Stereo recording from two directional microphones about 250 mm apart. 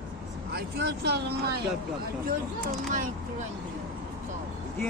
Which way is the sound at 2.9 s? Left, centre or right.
Right.